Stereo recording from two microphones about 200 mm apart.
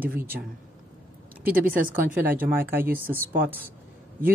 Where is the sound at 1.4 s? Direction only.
45° right (ahead or behind).